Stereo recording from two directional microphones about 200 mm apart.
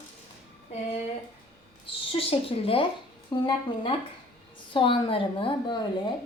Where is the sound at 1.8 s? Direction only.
25° left (ahead or behind).